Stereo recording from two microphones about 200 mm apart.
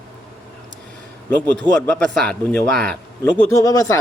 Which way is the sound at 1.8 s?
5° left (ahead or behind).